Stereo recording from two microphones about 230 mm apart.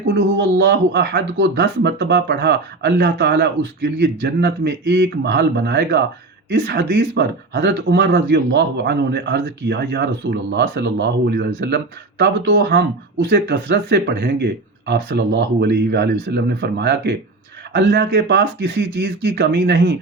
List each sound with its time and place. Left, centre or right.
0.1 s speech: right